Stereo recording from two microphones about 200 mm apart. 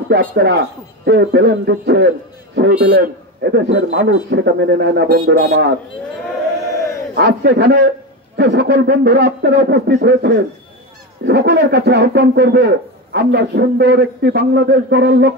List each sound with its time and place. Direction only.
0.1 s a man's voice: 50° right (ahead or behind)
7.2 s a man's voice: 55° right (ahead or behind)